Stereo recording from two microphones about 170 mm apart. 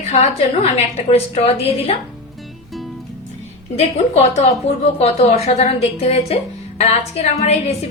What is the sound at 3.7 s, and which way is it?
A woman's voice, 40° left (ahead or behind).